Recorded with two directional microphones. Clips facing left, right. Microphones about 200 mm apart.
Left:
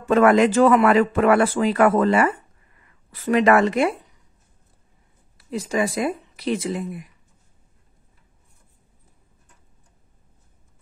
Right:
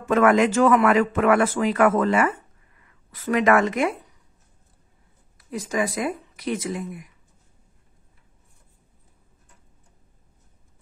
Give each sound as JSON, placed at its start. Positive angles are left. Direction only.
{"t": 0.1, "sound": "speech", "side_deg": 35}
{"t": 5.4, "sound": "speech", "side_deg": 30}